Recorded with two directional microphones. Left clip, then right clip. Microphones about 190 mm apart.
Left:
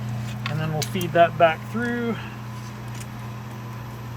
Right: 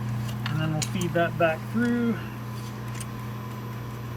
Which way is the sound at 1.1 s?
70° left (ahead or behind).